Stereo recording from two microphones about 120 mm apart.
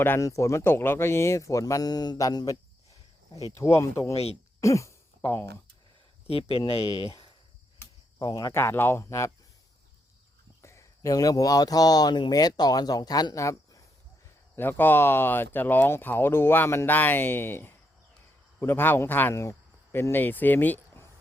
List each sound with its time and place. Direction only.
0.0 s speech: 20° left (ahead or behind)
4.1 s speech: 55° left (ahead or behind)
4.6 s a sound: 25° left (ahead or behind)
6.2 s speech: 55° left (ahead or behind)
8.2 s speech: 35° left (ahead or behind)
10.6 s speech: 25° left (ahead or behind)